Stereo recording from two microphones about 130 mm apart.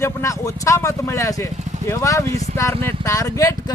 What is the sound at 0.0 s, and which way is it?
Speech, 25° left (ahead or behind).